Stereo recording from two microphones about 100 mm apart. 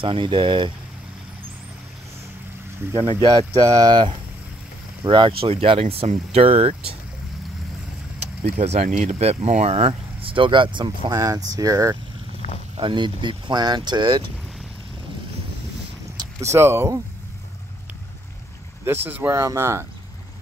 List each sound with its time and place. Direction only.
0.0 s speech: 60° right (ahead or behind)
2.9 s speech: 70° right (ahead or behind)
3.6 s speech: 40° right (ahead or behind); by 7.0 s 75° right (ahead or behind)
8.2 s speech: 90° right; by 11.1 s 55° right (ahead or behind)
11.1 s speech: 35° right (ahead or behind)
12.7 s speech: 55° right (ahead or behind)
16.5 s speech: 25° right (ahead or behind)
18.9 s speech: 20° right (ahead or behind)